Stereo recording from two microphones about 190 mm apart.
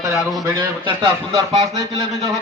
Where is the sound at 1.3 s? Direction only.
30° right (ahead or behind).